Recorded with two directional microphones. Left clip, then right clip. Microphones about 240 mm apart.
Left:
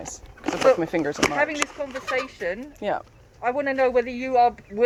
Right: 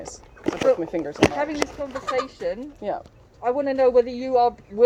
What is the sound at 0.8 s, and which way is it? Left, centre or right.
Speech, left.